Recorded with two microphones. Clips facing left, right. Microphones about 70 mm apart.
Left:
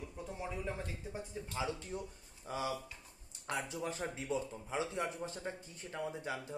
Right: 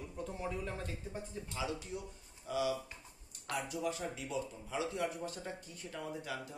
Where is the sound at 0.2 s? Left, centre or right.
Centre.